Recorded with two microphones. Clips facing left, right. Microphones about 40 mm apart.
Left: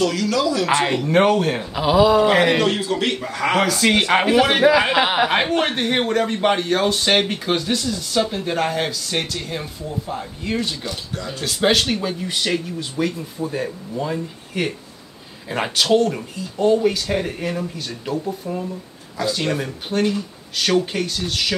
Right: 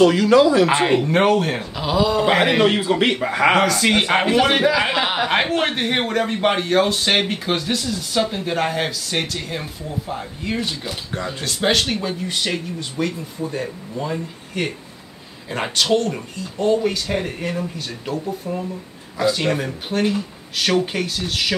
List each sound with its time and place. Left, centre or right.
0.0 s speech: right
1.0 s speech: centre
1.8 s a sound: centre
2.2 s speech: centre
2.6 s speech: right
3.5 s speech: centre
4.8 s a sound: centre
5.3 s speech: centre
19.1 s speech: centre